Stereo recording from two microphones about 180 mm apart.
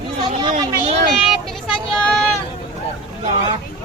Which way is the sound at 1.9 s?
5° left (ahead or behind).